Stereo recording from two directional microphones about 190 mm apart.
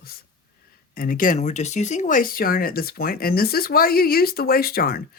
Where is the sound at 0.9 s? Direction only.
45° left (ahead or behind).